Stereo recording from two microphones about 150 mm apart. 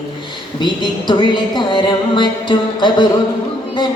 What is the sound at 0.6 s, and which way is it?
Speech, 30° left (ahead or behind).